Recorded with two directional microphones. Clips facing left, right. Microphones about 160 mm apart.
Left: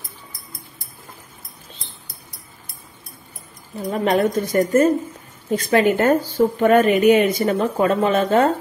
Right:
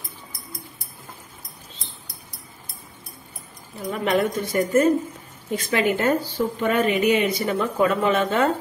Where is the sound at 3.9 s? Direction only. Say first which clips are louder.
Left 4 dB; 40° left (ahead or behind).